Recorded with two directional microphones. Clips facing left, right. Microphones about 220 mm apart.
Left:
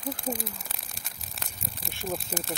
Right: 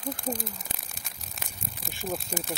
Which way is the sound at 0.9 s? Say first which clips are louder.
Even; centre (ahead or behind).